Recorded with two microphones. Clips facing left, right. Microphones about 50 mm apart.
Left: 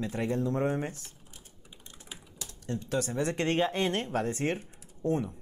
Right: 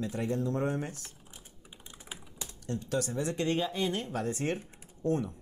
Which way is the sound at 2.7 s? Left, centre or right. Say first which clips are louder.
Left 1 dB; left.